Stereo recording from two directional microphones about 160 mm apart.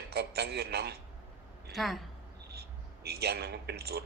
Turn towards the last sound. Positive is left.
turn(degrees=-80)